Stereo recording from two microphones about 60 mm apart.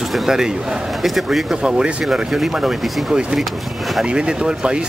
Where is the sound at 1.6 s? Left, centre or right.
Centre.